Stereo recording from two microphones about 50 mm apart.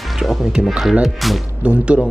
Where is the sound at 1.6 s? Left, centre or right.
Right.